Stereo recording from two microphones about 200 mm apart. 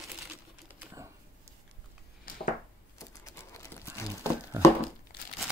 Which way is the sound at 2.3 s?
45° left (ahead or behind).